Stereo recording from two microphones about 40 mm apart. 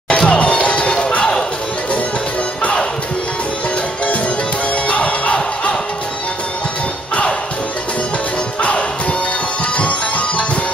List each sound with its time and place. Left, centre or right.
0.1 s crowd: left
4.8 s music: left
9.8 s music: left